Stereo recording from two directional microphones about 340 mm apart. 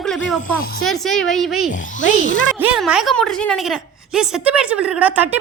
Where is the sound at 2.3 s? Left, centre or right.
Left.